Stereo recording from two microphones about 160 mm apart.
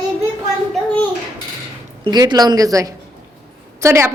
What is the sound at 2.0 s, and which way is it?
A woman's voice, 25° right (ahead or behind).